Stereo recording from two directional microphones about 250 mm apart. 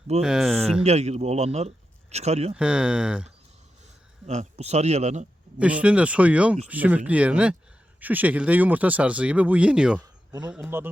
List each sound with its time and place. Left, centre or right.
0.2 s speech: centre
0.9 s speech: right
2.6 s speech: centre
4.3 s speech: right
5.5 s speech: centre